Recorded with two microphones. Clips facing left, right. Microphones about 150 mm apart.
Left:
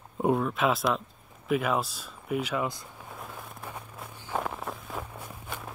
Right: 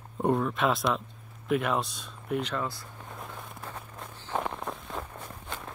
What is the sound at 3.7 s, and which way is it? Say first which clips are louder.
Walk: even; 10° left (ahead or behind).